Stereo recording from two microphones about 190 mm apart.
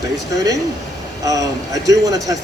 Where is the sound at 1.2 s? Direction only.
20° right (ahead or behind).